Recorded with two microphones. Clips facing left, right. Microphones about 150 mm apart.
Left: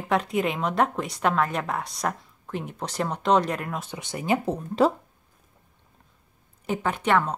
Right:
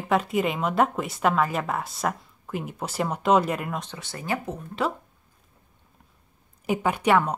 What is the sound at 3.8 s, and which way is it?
Speech, 15° left (ahead or behind).